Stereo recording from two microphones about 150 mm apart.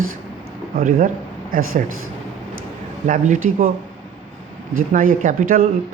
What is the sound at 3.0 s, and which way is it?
Speech, 60° right (ahead or behind).